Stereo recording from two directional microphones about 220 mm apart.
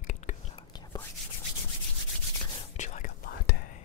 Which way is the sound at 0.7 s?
20° left (ahead or behind).